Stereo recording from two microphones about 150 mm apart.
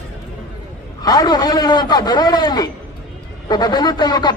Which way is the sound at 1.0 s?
25° left (ahead or behind).